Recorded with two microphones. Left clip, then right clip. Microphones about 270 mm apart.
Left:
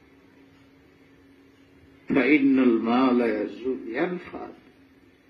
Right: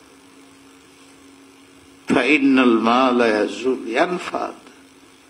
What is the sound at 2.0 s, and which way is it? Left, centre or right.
A man's voice, right.